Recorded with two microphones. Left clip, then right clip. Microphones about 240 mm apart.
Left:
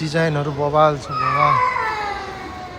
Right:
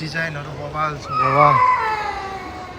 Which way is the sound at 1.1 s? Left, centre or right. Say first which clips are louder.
Right 5 dB; centre.